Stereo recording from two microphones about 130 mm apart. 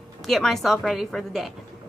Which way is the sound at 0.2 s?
Centre (ahead or behind).